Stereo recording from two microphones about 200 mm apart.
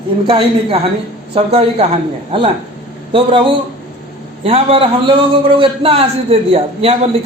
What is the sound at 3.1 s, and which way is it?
A man's voice, 25° right (ahead or behind).